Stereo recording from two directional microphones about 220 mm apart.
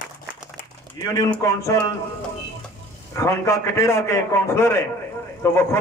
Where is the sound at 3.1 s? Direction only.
10° left (ahead or behind).